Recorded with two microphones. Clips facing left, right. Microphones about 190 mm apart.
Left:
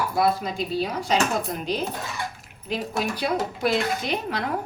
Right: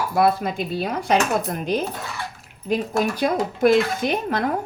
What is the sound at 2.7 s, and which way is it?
Speech, 45° right (ahead or behind).